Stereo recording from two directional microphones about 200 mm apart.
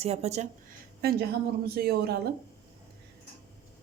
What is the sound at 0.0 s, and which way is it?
Speech, 30° right (ahead or behind).